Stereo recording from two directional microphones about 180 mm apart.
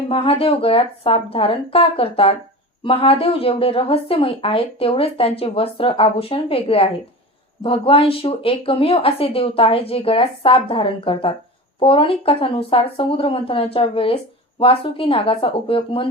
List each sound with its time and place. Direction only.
0.1 s speech: 30° left (ahead or behind)